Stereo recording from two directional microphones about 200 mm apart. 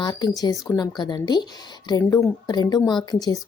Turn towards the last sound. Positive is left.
turn(degrees=20)  # may be behind; listen again after turning